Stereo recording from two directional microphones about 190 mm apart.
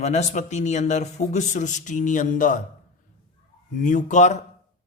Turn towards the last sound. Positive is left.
turn(degrees=40)  # may be behind; listen again after turning